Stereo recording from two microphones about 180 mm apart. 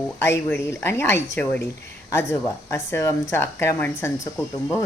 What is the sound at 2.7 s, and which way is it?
Speech, 15° left (ahead or behind).